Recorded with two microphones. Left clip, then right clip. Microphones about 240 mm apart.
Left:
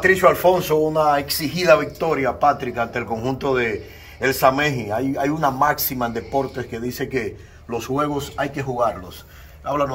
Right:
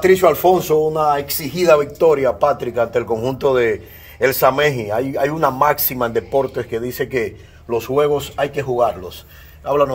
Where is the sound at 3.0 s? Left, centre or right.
Right.